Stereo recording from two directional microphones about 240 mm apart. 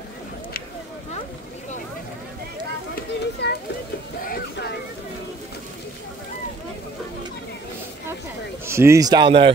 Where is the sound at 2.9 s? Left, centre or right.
Left.